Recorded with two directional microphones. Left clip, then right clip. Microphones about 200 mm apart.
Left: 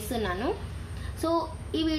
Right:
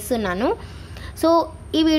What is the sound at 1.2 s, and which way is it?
Child singing, 55° right (ahead or behind).